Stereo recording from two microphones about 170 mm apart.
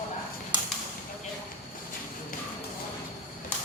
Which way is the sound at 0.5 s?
25° right (ahead or behind).